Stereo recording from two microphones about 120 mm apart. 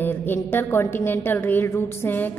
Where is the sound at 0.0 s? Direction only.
15° left (ahead or behind).